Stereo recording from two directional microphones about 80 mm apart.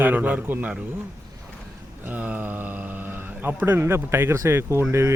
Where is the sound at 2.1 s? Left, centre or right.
Right.